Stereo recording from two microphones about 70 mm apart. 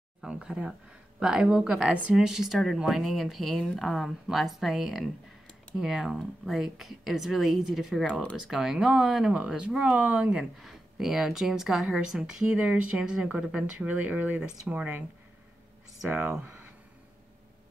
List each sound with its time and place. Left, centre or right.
0.2 s speech: centre
8.1 s speech: centre
8.4 s speech: centre; by 10.3 s right
10.3 s speech: centre; by 15.0 s right
16.2 s speech: centre